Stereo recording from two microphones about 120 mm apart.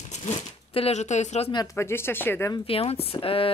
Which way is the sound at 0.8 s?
65° left (ahead or behind).